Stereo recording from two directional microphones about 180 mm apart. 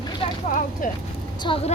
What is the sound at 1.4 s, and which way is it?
Speech, 30° left (ahead or behind).